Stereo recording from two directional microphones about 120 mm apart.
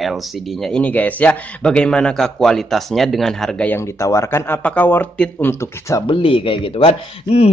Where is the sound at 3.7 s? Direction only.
25° left (ahead or behind).